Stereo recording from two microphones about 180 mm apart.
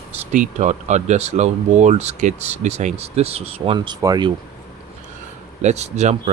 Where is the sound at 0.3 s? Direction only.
40° right (ahead or behind); by 4.3 s 25° right (ahead or behind).